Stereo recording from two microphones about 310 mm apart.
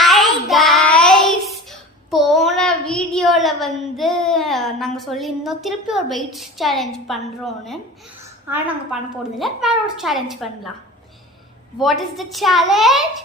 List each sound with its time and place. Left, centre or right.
0.0 s child singing: centre
8.4 s a woman's voice: centre
11.8 s a woman's voice: centre